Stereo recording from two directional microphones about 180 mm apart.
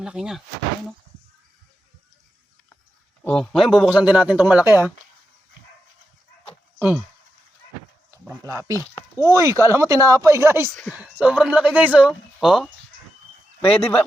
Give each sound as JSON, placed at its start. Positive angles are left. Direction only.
{"t": 0.0, "sound": "speech", "side_deg": -5}
{"t": 3.2, "sound": "speech", "side_deg": 5}
{"t": 6.7, "sound": "speech", "side_deg": -10}
{"t": 8.3, "sound": "speech", "side_deg": -20}
{"t": 8.7, "sound": "speech", "side_deg": 15}
{"t": 9.2, "sound": "speech", "side_deg": -15}